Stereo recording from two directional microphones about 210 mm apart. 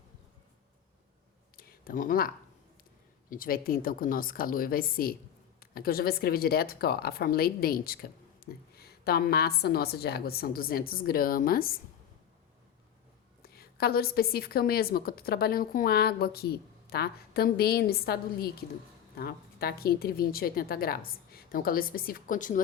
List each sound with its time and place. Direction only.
1.5 s a sound: 45° left (ahead or behind)
3.2 s speech: 40° left (ahead or behind)
13.4 s speech: 45° left (ahead or behind)